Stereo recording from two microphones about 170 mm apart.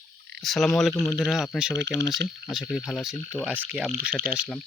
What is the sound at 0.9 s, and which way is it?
Speech, 15° left (ahead or behind).